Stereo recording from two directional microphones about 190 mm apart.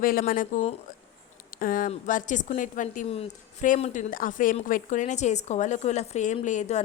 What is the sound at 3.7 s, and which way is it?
A woman's voice, 40° left (ahead or behind).